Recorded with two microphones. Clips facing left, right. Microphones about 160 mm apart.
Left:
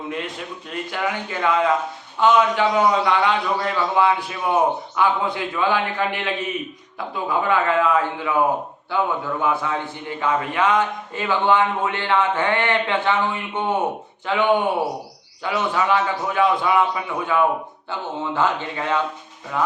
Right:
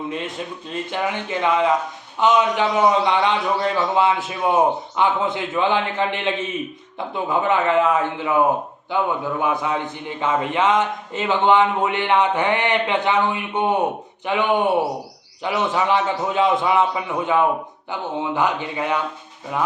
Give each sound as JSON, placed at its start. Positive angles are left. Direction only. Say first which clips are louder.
{"t": 0.7, "sound": "a man's voice", "louder": "right 1 dB", "side_deg": -20}